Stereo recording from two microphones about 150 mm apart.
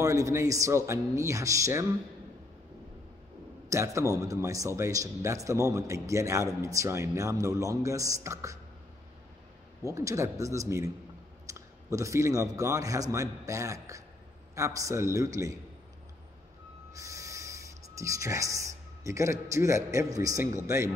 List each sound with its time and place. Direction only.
0.0 s a man's voice: 20° right (ahead or behind)
3.6 s a man's voice: 20° right (ahead or behind)
9.8 s a man's voice: 20° right (ahead or behind)
16.9 s speech: 20° right (ahead or behind)